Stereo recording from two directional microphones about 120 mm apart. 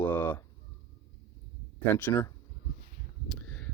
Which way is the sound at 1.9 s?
15° left (ahead or behind).